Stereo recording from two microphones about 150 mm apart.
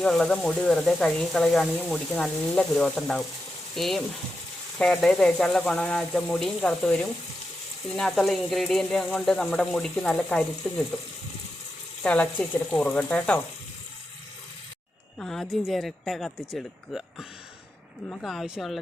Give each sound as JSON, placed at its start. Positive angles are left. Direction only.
{"t": 0.0, "sound": "speech", "side_deg": 5}
{"t": 12.0, "sound": "speech", "side_deg": 10}
{"t": 15.2, "sound": "speech", "side_deg": 5}